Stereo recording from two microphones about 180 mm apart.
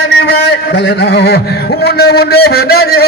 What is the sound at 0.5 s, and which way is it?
A man's voice, 70° left (ahead or behind).